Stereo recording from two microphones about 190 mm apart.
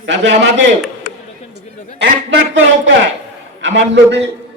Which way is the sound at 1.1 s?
50° left (ahead or behind).